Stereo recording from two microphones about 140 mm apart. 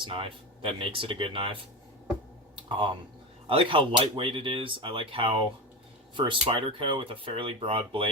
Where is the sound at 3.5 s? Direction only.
40° right (ahead or behind).